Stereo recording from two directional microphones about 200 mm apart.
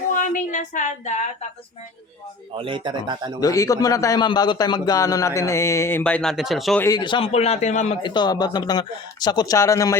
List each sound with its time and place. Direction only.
0.1 s speech: 40° left (ahead or behind)
2.6 s speech: 25° right (ahead or behind)
3.4 s a man's voice: 15° left (ahead or behind); by 6.8 s centre (ahead or behind)
6.8 s a man's voice: 20° left (ahead or behind)
8.0 s speech: 20° left (ahead or behind)